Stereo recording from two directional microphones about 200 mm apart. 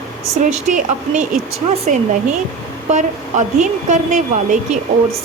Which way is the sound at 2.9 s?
35° right (ahead or behind).